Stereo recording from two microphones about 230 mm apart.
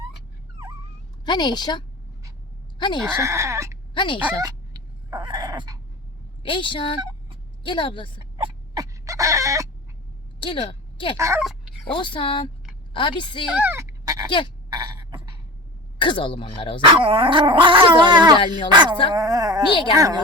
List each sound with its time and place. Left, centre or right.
1.2 s a woman's voice: centre
3.0 s speech: centre
3.9 s speech: left
4.3 s dog: centre
6.4 s speech: left
8.2 s chicken: right
10.4 s a woman's voice: left
11.2 s speech: centre
11.9 s speech: left
13.6 s dog: centre
14.3 s speech: left
16.0 s speech: left
16.8 s speech: right
19.7 s speech: left